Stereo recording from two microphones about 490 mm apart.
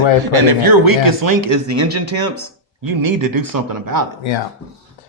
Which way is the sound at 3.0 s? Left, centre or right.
Right.